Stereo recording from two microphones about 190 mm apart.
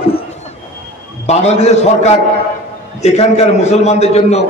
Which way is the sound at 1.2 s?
35° left (ahead or behind).